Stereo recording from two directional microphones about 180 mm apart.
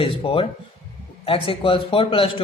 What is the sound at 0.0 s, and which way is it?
A man's voice, 30° left (ahead or behind).